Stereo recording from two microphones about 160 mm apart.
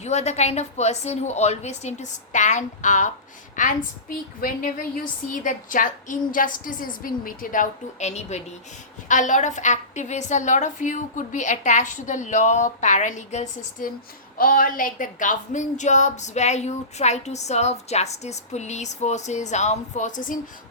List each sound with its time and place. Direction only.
0.0 s a woman's voice: 45° left (ahead or behind)